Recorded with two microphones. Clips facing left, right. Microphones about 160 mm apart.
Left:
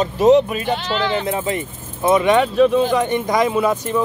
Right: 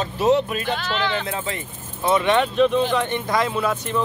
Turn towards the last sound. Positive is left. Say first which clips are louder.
# left 5 dB
turn(degrees=10)  # may be behind; listen again after turning